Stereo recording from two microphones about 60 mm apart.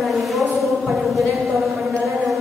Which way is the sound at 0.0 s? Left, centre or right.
Centre.